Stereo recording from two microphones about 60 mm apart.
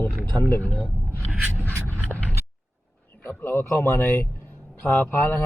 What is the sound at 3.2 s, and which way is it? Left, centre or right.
Speech, left.